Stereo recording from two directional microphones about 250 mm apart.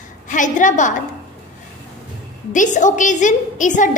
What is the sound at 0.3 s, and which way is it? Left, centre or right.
Speech, left.